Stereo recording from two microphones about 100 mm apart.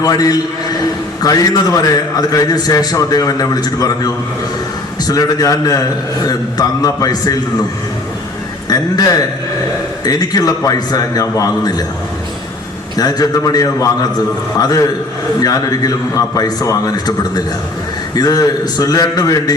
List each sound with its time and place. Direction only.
0.0 s a man's voice: 40° left (ahead or behind)
10.0 s a man's voice: 40° left (ahead or behind)
13.0 s a man's voice: 40° left (ahead or behind)